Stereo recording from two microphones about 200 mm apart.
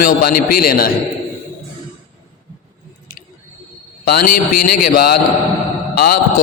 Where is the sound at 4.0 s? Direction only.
45° left (ahead or behind).